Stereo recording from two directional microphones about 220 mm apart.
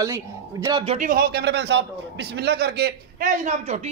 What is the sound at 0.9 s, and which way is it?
A man's voice, 40° right (ahead or behind).